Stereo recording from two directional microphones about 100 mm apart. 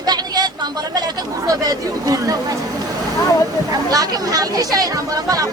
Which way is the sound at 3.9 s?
40° right (ahead or behind).